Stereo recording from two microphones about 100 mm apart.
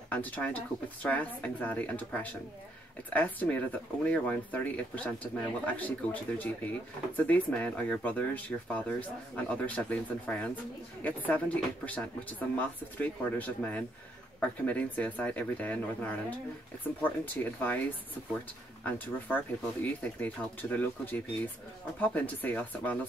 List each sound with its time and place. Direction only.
0.1 s speech: 15° left (ahead or behind)
18.9 s speech: 15° left (ahead or behind)